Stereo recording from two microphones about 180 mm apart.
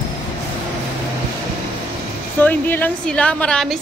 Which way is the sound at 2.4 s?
10° left (ahead or behind).